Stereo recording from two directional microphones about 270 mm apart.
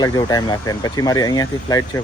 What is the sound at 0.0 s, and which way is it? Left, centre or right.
Speech, centre.